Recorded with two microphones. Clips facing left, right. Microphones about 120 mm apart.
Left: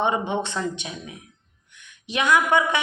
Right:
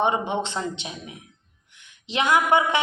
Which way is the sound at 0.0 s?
15° right (ahead or behind).